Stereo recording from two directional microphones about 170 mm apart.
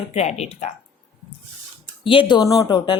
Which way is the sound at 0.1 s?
40° left (ahead or behind).